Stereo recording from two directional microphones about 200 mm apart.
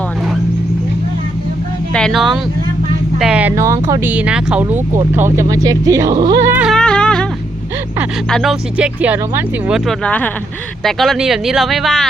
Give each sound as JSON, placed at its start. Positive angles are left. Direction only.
{"t": 1.9, "sound": "speech", "side_deg": 5}
{"t": 6.7, "sound": "a sound", "side_deg": 5}
{"t": 8.3, "sound": "speech", "side_deg": 0}